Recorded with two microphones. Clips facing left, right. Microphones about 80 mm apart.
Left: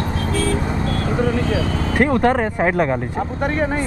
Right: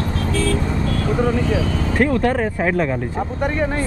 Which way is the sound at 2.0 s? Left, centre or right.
Left.